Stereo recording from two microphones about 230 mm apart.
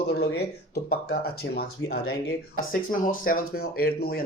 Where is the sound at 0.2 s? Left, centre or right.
Left.